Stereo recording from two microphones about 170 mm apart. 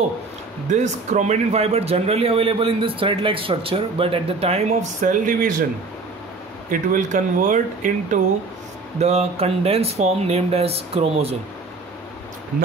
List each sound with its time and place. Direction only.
0.7 s a man's voice: 45° right (ahead or behind)
5.2 s speech: 55° right (ahead or behind)
6.7 s speech: 50° right (ahead or behind)
9.0 s a man's voice: 35° right (ahead or behind)